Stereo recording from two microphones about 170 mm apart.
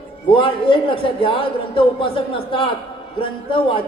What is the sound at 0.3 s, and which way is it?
A man's voice, 30° left (ahead or behind).